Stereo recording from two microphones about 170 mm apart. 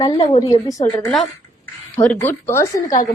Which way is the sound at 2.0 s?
10° left (ahead or behind).